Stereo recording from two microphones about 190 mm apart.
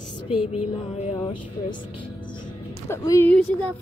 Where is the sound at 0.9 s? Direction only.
30° left (ahead or behind).